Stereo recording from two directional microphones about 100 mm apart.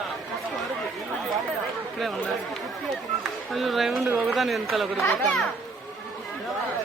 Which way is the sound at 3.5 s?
Centre (ahead or behind).